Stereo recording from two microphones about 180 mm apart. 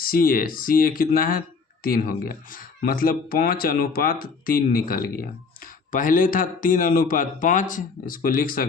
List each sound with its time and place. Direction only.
0.0 s speech: 55° left (ahead or behind)